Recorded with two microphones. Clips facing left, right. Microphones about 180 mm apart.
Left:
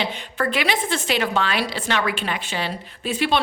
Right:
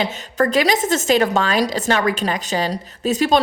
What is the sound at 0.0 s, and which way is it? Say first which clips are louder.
A woman's voice: right 5 dB; 45° right (ahead or behind).